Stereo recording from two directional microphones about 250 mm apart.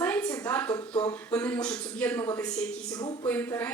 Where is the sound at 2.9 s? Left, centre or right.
Centre.